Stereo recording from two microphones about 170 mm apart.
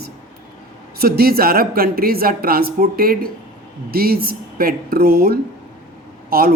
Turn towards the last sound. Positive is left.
turn(degrees=-60)  # may be behind; listen again after turning